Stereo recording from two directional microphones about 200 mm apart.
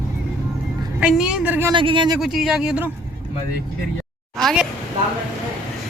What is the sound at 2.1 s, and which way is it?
Speech, centre (ahead or behind).